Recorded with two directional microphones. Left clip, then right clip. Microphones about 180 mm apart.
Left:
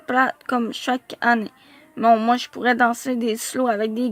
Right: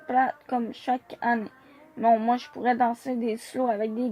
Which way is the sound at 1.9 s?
40° left (ahead or behind).